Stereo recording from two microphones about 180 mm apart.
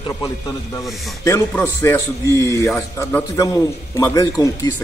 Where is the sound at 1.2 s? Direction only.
15° left (ahead or behind).